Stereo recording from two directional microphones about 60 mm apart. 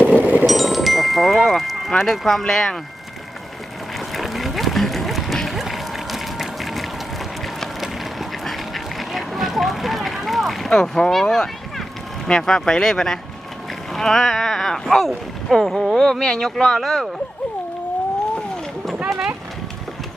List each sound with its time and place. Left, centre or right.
0.0 s music: right
0.4 s music: centre
2.0 s speech: centre
4.1 s run: centre
7.4 s duck: centre
12.2 s speech: centre